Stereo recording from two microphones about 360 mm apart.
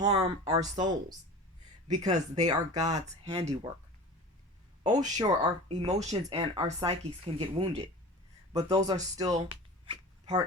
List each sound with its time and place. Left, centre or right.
0.0 s speech: centre
4.8 s speech: centre